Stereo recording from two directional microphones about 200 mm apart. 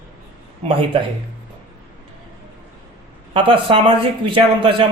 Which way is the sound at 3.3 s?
25° right (ahead or behind).